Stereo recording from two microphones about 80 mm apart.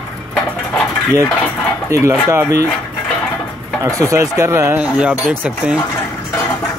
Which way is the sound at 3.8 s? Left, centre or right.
Right.